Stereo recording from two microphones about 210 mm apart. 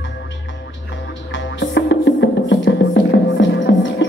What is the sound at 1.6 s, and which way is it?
Music, 55° left (ahead or behind).